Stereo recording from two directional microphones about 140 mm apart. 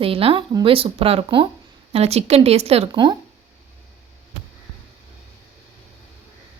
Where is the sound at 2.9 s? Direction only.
30° right (ahead or behind).